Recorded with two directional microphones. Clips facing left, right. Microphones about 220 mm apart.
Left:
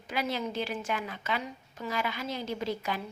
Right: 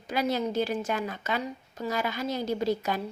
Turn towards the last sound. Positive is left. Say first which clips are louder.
# right 5 dB
turn(degrees=-40)  # may be behind; listen again after turning